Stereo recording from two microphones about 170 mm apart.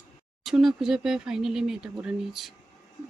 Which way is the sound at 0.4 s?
Centre (ahead or behind).